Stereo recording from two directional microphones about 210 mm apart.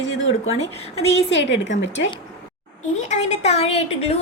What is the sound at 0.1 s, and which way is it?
A woman's voice, 65° left (ahead or behind).